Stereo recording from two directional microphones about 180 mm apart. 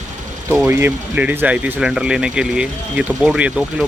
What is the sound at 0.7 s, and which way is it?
Speech, 10° right (ahead or behind).